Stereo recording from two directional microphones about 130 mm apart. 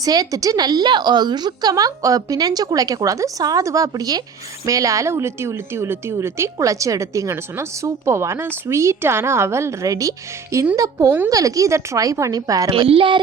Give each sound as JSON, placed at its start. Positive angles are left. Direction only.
{"t": 0.0, "sound": "a woman's voice", "side_deg": -30}
{"t": 12.7, "sound": "a woman's voice", "side_deg": -45}